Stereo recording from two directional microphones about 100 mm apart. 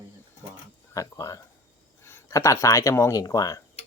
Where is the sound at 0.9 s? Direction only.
30° left (ahead or behind).